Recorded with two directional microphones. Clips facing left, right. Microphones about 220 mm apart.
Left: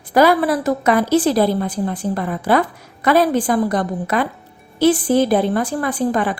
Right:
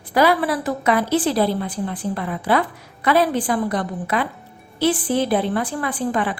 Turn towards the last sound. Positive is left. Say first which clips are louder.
# left 4 dB
turn(degrees=40)  # may be behind; listen again after turning